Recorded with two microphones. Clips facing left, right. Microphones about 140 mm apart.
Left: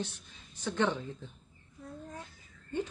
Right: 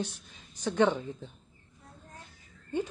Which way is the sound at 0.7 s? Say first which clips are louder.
Right 5 dB; 15° right (ahead or behind).